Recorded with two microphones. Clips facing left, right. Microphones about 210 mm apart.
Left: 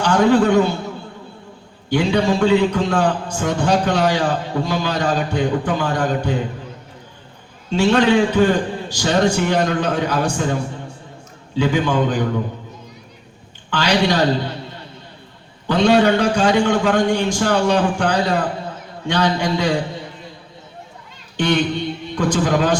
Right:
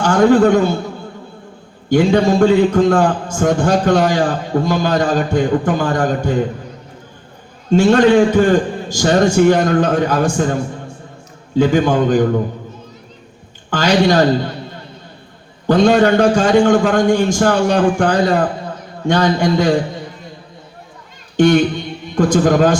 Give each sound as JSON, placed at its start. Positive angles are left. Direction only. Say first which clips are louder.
{"t": 0.0, "sound": "a man's voice", "louder": "right 4 dB", "side_deg": -45}
{"t": 1.9, "sound": "a man's voice", "louder": "right 5 dB", "side_deg": -50}
{"t": 7.7, "sound": "a man's voice", "louder": "right 5 dB", "side_deg": -45}
{"t": 11.5, "sound": "a man's voice", "louder": "right 5 dB", "side_deg": -45}
{"t": 13.7, "sound": "a man's voice", "louder": "right 4 dB", "side_deg": -45}
{"t": 15.6, "sound": "a man's voice", "louder": "right 3 dB", "side_deg": -45}
{"t": 21.3, "sound": "a man's voice", "louder": "right 7 dB", "side_deg": -45}